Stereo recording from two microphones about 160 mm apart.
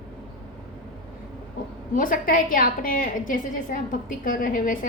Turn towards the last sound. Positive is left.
turn(degrees=60)  # may be behind; listen again after turning